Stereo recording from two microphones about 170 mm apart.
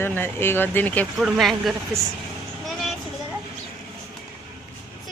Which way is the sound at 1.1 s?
Centre (ahead or behind).